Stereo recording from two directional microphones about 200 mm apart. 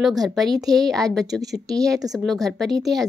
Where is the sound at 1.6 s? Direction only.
15° right (ahead or behind).